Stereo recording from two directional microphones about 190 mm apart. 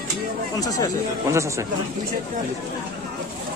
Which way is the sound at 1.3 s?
15° right (ahead or behind).